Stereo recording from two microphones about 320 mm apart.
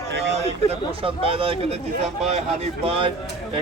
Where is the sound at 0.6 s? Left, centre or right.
Centre.